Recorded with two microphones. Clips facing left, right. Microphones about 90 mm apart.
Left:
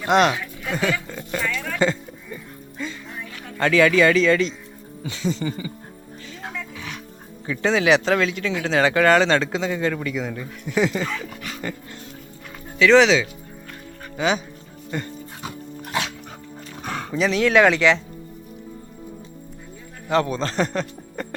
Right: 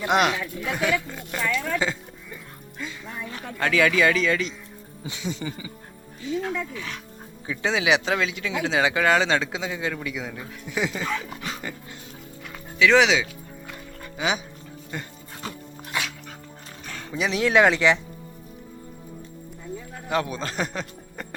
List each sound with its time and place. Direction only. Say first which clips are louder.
0.1 s a sound: left 4 dB; 10° right (ahead or behind)
1.8 s music: left 6 dB; 5° right (ahead or behind)
3.6 s speech: left 4 dB; 5° right (ahead or behind)
6.4 s oink: right 4 dB; 20° left (ahead or behind)
7.4 s speech: left 4 dB; 10° right (ahead or behind)
12.8 s speech: left 4 dB; 10° right (ahead or behind)
16.8 s dog: left 8 dB; 60° left (ahead or behind)
17.2 s speech: left 3 dB; 15° right (ahead or behind)
20.1 s speech: left 5 dB; 5° right (ahead or behind)